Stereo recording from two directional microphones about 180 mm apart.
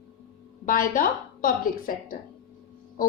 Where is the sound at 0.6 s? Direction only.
50° left (ahead or behind).